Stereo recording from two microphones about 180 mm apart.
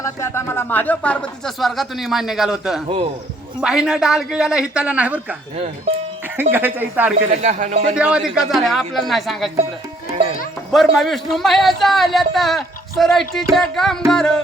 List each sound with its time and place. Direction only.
0.0 s a man's voice: 15° left (ahead or behind); by 5.4 s 10° right (ahead or behind)
6.5 s speech: 10° right (ahead or behind)
7.3 s speech: 40° right (ahead or behind)
7.9 s a man's voice: 5° right (ahead or behind)
10.7 s a man's voice: centre (ahead or behind)